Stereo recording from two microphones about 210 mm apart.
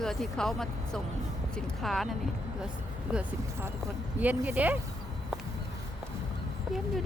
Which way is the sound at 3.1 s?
10° right (ahead or behind).